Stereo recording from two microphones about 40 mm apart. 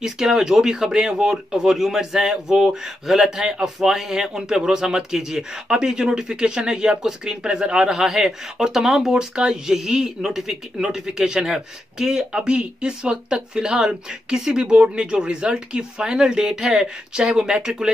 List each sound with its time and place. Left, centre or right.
0.0 s speech: centre
8.1 s speech: centre
9.1 s speech: right
9.5 s speech: centre